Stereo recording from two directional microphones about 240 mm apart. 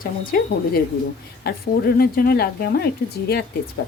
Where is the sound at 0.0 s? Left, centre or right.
Left.